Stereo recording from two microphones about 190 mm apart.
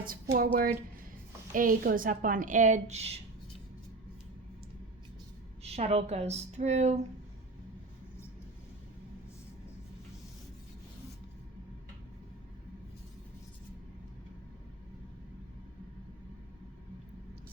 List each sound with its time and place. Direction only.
0.0 s a woman's voice: 50° right (ahead or behind)
5.6 s speech: 35° right (ahead or behind)